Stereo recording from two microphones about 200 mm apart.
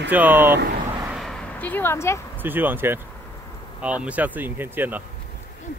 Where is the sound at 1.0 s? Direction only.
Centre (ahead or behind).